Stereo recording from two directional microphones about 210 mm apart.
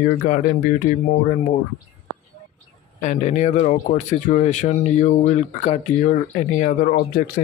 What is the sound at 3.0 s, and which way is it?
Speech, 35° left (ahead or behind).